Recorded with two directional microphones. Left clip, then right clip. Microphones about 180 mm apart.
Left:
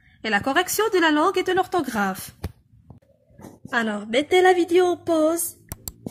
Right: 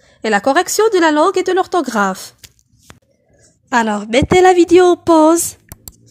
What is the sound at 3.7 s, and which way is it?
A woman's voice, 50° right (ahead or behind).